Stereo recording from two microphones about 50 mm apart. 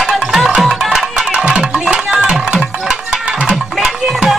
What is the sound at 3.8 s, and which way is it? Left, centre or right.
Music, centre.